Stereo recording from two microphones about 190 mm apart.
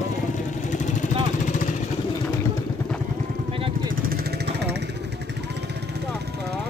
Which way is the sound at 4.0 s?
55° right (ahead or behind).